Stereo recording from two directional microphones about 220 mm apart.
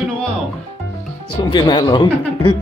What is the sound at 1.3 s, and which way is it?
Speech, 20° left (ahead or behind).